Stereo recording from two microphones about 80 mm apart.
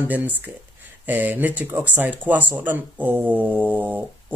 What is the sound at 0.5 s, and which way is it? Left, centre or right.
Speech, centre.